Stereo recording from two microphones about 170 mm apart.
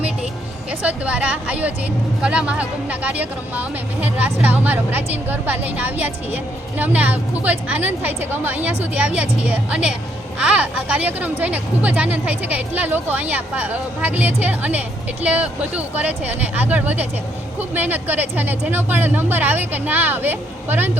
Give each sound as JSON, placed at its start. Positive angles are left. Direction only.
{"t": 0.7, "sound": "speech", "side_deg": -10}